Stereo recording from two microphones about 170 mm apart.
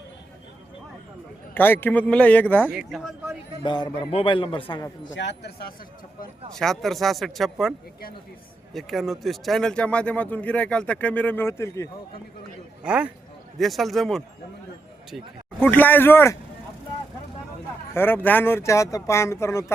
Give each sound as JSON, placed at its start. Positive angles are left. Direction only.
{"t": 1.5, "sound": "speech", "side_deg": 10}
{"t": 2.6, "sound": "speech", "side_deg": -5}
{"t": 3.6, "sound": "a man's voice", "side_deg": 25}
{"t": 5.0, "sound": "speech", "side_deg": 90}
{"t": 6.5, "sound": "speech", "side_deg": 0}
{"t": 8.7, "sound": "speech", "side_deg": 0}
{"t": 12.8, "sound": "speech", "side_deg": -5}
{"t": 15.6, "sound": "speech", "side_deg": 10}
{"t": 17.9, "sound": "speech", "side_deg": 10}